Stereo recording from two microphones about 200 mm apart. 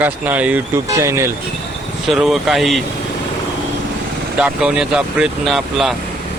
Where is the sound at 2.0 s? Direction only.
Centre (ahead or behind).